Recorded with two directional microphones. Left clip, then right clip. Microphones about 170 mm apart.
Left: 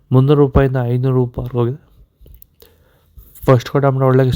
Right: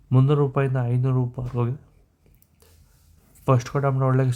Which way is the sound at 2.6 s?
35° left (ahead or behind).